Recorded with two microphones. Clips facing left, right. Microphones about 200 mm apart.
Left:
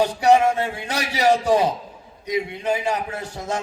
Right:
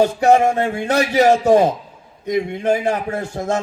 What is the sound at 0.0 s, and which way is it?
Music, 50° right (ahead or behind).